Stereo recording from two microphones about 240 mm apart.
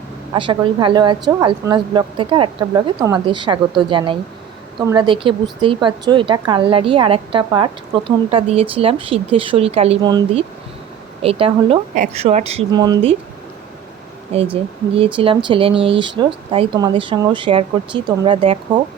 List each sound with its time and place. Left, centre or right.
0.3 s a woman's voice: centre
14.5 s a woman's voice: right